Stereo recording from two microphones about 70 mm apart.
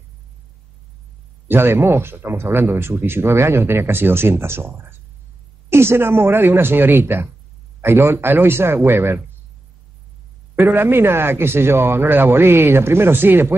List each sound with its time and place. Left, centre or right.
1.5 s speech: right
10.5 s speech: right